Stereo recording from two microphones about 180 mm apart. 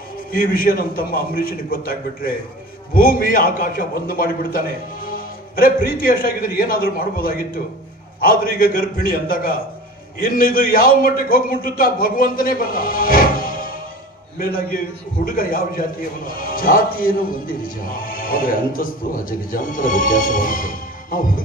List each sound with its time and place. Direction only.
0.3 s speech: 55° left (ahead or behind)
15.2 s speech: 50° left (ahead or behind)